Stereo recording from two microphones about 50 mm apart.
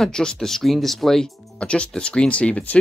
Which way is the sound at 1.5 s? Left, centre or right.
Left.